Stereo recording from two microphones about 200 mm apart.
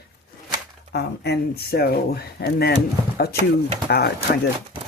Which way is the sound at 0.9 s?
55° left (ahead or behind).